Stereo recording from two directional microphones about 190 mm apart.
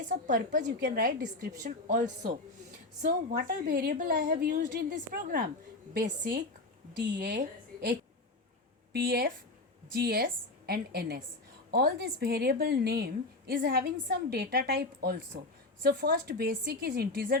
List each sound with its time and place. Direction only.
0.1 s a woman's voice: 45° right (ahead or behind)
3.1 s a woman's voice: 55° right (ahead or behind)
7.2 s a woman's voice: 60° right (ahead or behind)
8.9 s a woman's voice: 55° right (ahead or behind)